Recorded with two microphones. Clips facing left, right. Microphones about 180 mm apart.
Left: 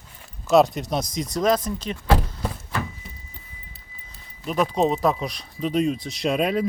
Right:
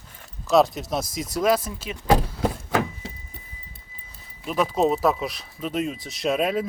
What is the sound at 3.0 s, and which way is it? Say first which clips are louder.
Vehicle: right 6 dB; 80° right.